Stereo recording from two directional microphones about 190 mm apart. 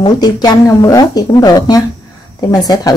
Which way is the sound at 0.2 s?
20° left (ahead or behind).